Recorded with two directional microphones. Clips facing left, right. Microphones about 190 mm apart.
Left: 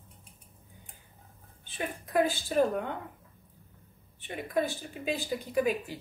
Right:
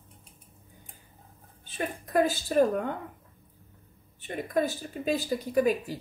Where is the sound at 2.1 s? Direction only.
40° right (ahead or behind).